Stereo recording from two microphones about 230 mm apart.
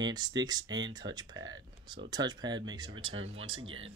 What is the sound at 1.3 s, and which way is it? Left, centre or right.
Speech, right.